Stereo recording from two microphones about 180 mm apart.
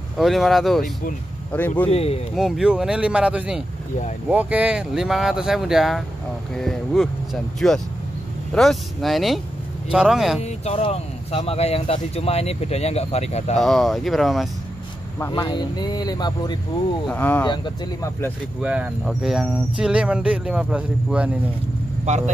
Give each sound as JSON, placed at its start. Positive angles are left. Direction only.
{"t": 0.2, "sound": "speech", "side_deg": 0}
{"t": 1.9, "sound": "speech", "side_deg": 35}
{"t": 2.3, "sound": "speech", "side_deg": 0}
{"t": 10.4, "sound": "speech", "side_deg": 35}
{"t": 13.6, "sound": "speech", "side_deg": 0}
{"t": 15.1, "sound": "speech", "side_deg": 20}
{"t": 17.1, "sound": "speech", "side_deg": 10}
{"t": 17.5, "sound": "speech", "side_deg": 25}
{"t": 18.6, "sound": "speech", "side_deg": -5}
{"t": 22.0, "sound": "speech", "side_deg": -40}